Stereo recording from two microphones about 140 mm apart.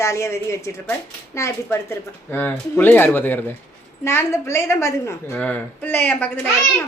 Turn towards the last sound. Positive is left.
turn(degrees=10)  # may be behind; listen again after turning